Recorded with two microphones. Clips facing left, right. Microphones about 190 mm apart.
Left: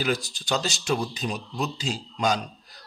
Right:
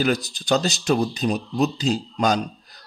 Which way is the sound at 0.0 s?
40° right (ahead or behind).